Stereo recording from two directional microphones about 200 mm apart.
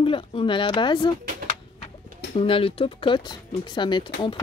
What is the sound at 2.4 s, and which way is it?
Speech, 30° left (ahead or behind).